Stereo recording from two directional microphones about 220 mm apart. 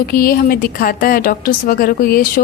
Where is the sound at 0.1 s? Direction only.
40° left (ahead or behind).